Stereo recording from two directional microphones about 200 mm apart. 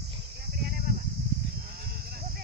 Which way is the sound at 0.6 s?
45° right (ahead or behind).